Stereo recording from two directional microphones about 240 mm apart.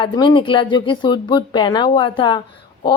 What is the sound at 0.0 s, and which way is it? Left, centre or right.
A woman's voice, centre.